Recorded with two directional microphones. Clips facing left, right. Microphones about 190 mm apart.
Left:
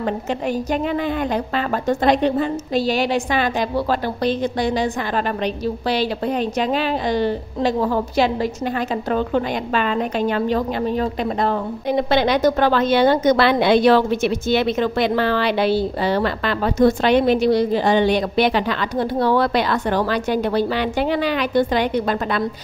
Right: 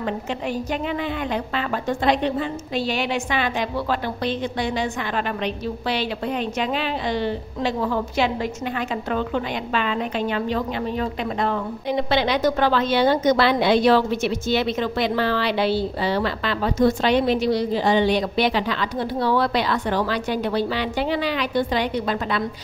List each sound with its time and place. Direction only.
1.9 s a woman's voice: 40° left (ahead or behind)